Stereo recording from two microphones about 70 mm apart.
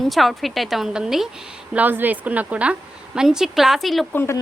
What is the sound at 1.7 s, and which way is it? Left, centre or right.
Speech, right.